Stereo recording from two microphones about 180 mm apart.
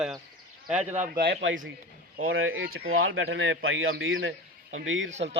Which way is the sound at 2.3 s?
90° right.